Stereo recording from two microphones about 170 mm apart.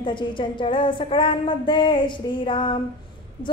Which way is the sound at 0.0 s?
30° left (ahead or behind).